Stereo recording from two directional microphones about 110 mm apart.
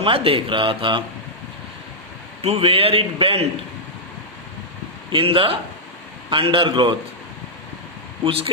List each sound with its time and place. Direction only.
0.0 s speech: 55° right (ahead or behind)
2.4 s a man's voice: 65° right (ahead or behind)
5.1 s speech: 55° right (ahead or behind)
8.2 s a man's voice: 60° right (ahead or behind)